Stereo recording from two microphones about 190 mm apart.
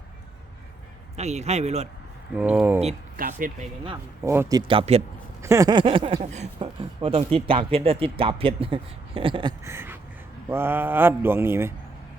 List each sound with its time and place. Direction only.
1.1 s speech: 35° right (ahead or behind)
2.3 s mantra: 5° right (ahead or behind)
3.2 s speech: 45° right (ahead or behind)
4.2 s speech: 10° right (ahead or behind); by 5.0 s 30° right (ahead or behind)
5.4 s speech: 15° right (ahead or behind)
10.5 s mantra: 10° right (ahead or behind)